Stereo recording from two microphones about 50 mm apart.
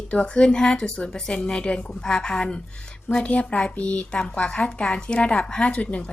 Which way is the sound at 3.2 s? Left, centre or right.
Left.